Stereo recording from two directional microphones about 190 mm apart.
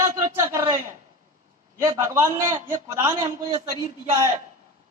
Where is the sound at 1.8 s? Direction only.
15° right (ahead or behind).